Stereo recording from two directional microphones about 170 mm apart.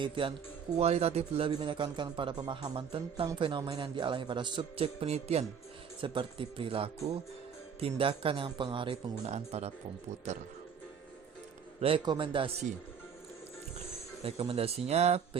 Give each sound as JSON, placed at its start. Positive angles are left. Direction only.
{"t": 0.0, "sound": "a man's voice", "side_deg": -30}
{"t": 11.8, "sound": "speech", "side_deg": -30}
{"t": 14.3, "sound": "speech", "side_deg": -35}